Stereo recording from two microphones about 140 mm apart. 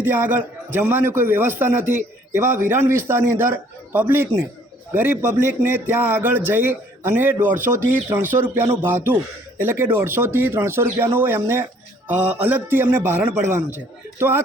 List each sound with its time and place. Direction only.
0.0 s a man's voice: 15° right (ahead or behind)